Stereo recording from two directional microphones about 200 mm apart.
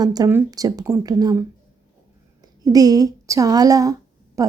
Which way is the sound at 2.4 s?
20° right (ahead or behind).